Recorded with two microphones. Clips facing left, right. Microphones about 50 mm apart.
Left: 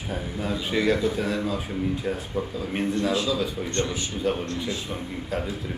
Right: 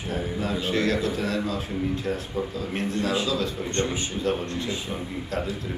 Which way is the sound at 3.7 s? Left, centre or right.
Right.